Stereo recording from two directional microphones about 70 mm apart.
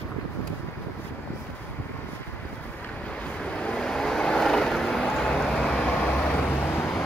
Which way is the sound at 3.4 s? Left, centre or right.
Centre.